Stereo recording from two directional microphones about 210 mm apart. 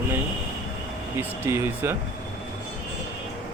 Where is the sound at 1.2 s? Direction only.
10° right (ahead or behind).